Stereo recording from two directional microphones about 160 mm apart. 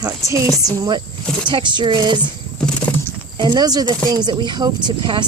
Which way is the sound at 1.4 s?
30° right (ahead or behind).